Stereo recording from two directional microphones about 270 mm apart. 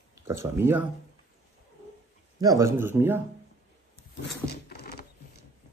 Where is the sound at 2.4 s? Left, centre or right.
Centre.